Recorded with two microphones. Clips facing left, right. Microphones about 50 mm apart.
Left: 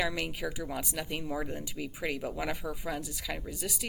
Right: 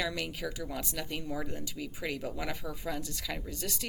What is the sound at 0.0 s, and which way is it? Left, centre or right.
Speech, centre.